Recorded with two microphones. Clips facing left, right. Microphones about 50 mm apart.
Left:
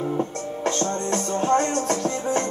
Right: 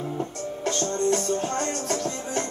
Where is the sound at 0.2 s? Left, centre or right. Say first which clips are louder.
Left 4 dB; left.